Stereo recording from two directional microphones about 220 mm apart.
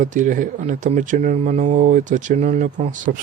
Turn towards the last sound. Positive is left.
turn(degrees=-35)  # may be behind; listen again after turning